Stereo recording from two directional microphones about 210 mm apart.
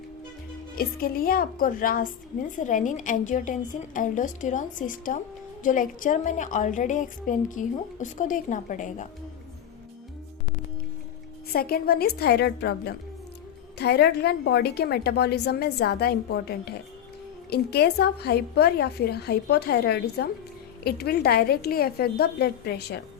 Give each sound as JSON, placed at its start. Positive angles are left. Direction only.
{"t": 0.8, "sound": "a woman's voice", "side_deg": 45}
{"t": 11.5, "sound": "a woman's voice", "side_deg": 45}